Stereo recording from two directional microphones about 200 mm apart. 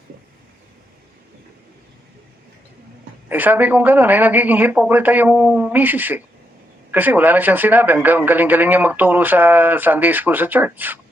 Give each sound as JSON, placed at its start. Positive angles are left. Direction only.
{"t": 3.2, "sound": "speech", "side_deg": -10}